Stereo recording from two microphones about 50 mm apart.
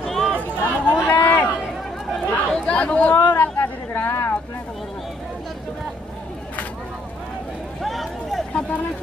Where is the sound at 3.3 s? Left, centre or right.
Left.